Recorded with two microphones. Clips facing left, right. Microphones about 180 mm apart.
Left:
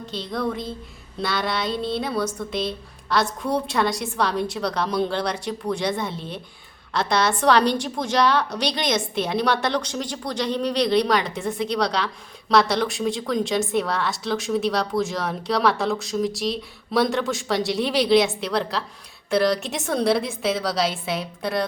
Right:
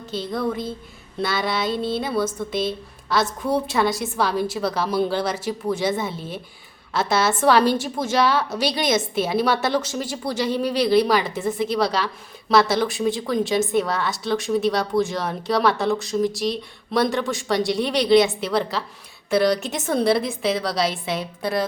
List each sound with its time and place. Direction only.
0.0 s a woman's voice: centre (ahead or behind)